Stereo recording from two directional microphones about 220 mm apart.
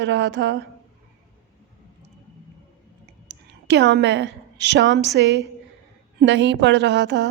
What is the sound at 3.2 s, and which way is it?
A woman's voice, 50° right (ahead or behind).